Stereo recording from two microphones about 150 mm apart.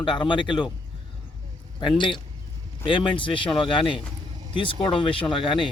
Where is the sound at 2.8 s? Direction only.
35° left (ahead or behind).